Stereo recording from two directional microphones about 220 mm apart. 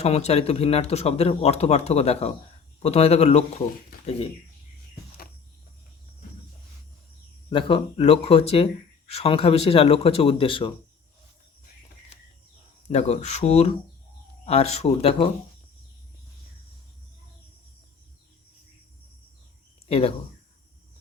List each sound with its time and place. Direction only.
0.0 s speech: 30° left (ahead or behind)
7.5 s speech: 25° left (ahead or behind)
12.9 s speech: 30° left (ahead or behind)
19.9 s speech: 25° left (ahead or behind)